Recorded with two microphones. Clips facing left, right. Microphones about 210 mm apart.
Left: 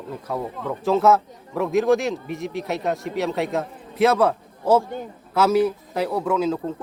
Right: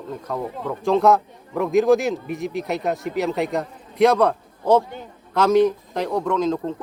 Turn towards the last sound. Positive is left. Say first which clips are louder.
# right 1 dB
turn(degrees=5)  # may be behind; listen again after turning